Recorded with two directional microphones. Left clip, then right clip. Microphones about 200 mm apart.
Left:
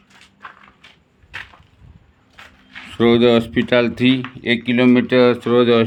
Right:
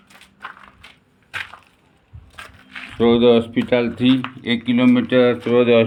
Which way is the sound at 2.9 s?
50° left (ahead or behind).